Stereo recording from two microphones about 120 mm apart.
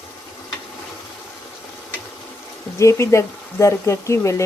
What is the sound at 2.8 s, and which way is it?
Speech, 25° left (ahead or behind).